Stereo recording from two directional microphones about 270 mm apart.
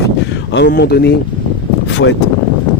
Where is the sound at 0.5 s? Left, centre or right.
Left.